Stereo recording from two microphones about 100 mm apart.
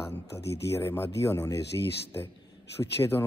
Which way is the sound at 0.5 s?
30° left (ahead or behind).